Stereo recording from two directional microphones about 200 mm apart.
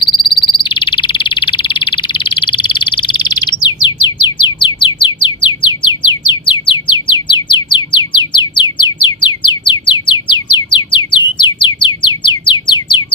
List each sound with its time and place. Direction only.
0.0 s frog: 20° left (ahead or behind)
4.0 s music: 25° left (ahead or behind)